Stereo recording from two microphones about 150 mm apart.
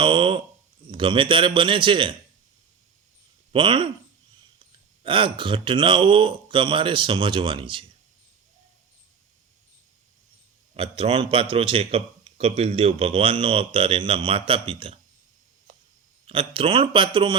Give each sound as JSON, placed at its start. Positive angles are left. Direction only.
{"t": 0.0, "sound": "a man's voice", "side_deg": -35}
{"t": 3.5, "sound": "a man's voice", "side_deg": -35}
{"t": 10.8, "sound": "a man's voice", "side_deg": -40}
{"t": 16.2, "sound": "a man's voice", "side_deg": -35}